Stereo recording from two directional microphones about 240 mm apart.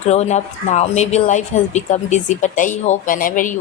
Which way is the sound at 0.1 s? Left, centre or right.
Left.